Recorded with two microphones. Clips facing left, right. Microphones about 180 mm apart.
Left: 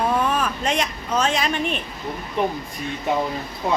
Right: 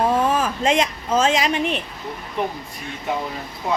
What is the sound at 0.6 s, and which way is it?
A woman's voice, 90° right.